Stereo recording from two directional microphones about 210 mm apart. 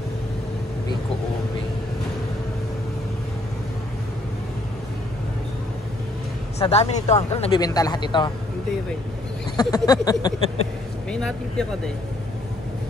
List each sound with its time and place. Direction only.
6.6 s speech: 30° left (ahead or behind)
9.6 s speech: 20° left (ahead or behind)
11.1 s speech: 5° left (ahead or behind)